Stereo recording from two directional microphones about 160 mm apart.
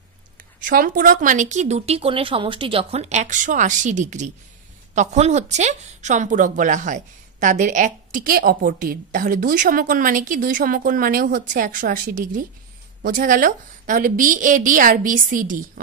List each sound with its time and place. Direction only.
0.7 s a woman's voice: 60° right (ahead or behind)